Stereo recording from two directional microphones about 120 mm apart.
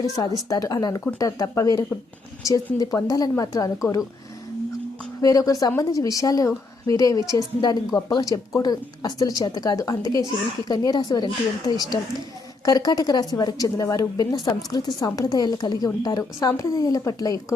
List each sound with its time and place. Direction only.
0.0 s a woman's voice: 30° left (ahead or behind)
5.2 s a woman's voice: 30° left (ahead or behind)